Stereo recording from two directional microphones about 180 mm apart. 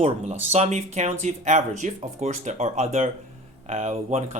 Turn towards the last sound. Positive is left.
turn(degrees=-40)  # may be behind; listen again after turning